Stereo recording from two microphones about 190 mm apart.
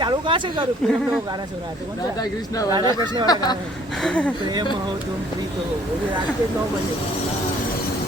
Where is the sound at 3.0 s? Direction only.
25° right (ahead or behind).